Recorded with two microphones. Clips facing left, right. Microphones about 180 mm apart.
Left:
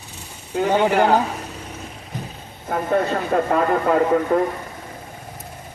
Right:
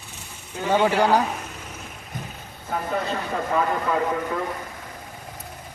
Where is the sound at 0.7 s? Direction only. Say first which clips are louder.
Left 1 dB; 15° left (ahead or behind).